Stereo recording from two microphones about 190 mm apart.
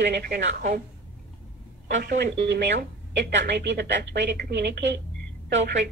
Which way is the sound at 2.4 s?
65° right (ahead or behind).